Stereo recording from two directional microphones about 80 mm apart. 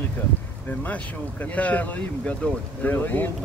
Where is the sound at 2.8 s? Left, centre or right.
Left.